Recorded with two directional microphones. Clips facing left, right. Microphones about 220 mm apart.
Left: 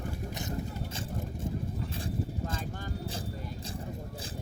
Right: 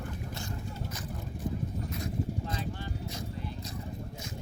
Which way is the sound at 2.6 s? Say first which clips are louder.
Right 1 dB; 50° left (ahead or behind).